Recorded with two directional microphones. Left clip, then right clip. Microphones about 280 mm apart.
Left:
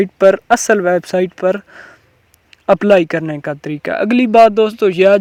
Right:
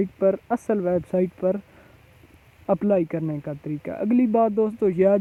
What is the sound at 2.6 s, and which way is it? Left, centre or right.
Speech, left.